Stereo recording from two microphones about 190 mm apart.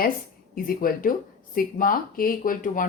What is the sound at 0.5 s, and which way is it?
A woman's voice, 50° left (ahead or behind).